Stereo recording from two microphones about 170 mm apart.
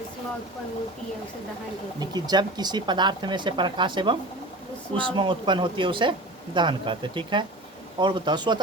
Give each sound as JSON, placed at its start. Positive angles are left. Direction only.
{"t": 2.0, "sound": "speech", "side_deg": -25}